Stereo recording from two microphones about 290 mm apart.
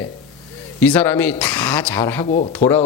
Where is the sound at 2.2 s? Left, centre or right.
Left.